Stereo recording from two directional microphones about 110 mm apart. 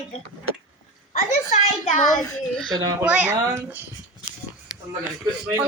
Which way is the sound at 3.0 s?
10° right (ahead or behind).